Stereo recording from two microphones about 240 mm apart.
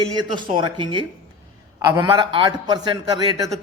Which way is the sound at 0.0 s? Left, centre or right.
Centre.